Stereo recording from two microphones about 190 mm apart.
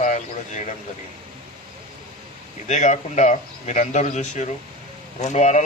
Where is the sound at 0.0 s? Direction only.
40° left (ahead or behind).